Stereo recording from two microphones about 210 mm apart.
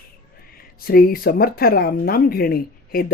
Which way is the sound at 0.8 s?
45° left (ahead or behind).